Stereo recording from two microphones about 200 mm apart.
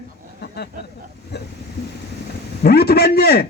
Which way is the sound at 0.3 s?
55° left (ahead or behind).